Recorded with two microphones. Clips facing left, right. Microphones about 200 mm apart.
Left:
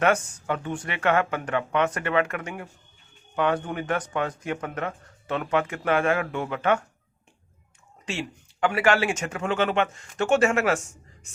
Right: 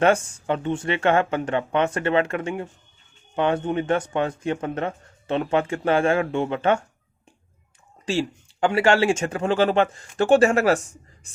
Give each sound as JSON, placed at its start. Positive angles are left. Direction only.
{"t": 0.0, "sound": "speech", "side_deg": -30}
{"t": 8.0, "sound": "speech", "side_deg": -30}